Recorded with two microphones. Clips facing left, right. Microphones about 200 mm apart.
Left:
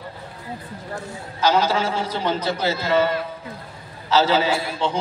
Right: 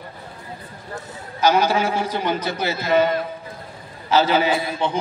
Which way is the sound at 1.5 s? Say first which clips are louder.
Right 1 dB; 10° right (ahead or behind).